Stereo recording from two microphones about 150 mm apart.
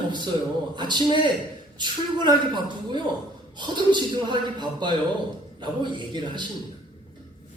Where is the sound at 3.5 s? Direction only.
30° right (ahead or behind).